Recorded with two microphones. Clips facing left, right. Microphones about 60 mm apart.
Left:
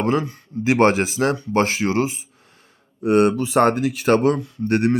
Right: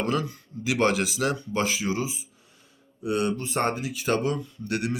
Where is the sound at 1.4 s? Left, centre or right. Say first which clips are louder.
Left 7 dB; left.